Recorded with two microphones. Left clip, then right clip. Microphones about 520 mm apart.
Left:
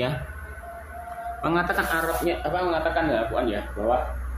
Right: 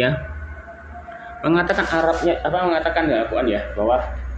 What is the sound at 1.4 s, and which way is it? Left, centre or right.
Speech, left.